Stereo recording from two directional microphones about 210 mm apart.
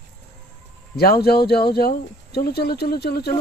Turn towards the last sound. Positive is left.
turn(degrees=50)  # may be behind; listen again after turning